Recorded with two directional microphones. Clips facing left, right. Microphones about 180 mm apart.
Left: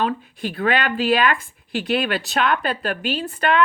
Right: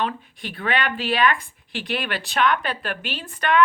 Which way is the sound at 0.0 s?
40° left (ahead or behind).